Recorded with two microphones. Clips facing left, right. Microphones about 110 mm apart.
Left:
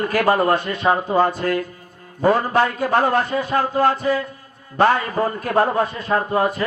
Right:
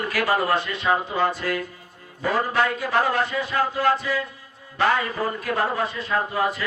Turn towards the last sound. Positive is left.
turn(degrees=45)  # may be behind; listen again after turning